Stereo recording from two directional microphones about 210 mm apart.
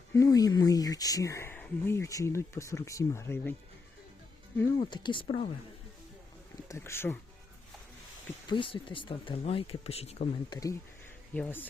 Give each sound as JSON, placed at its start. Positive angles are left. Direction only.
{"t": 0.1, "sound": "speech", "side_deg": 15}
{"t": 4.8, "sound": "speech", "side_deg": 20}
{"t": 6.7, "sound": "speech", "side_deg": 10}
{"t": 8.4, "sound": "speech", "side_deg": 25}
{"t": 11.3, "sound": "speech", "side_deg": 10}